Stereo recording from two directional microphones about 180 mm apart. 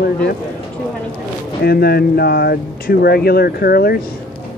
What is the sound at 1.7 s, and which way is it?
Speech, 60° left (ahead or behind).